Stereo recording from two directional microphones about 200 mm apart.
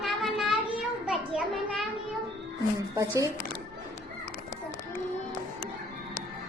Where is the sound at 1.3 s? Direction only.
Centre (ahead or behind).